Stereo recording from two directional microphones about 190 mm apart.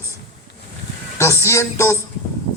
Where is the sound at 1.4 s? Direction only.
15° left (ahead or behind).